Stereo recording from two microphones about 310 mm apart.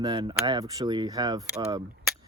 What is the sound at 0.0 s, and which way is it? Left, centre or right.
Speech, centre.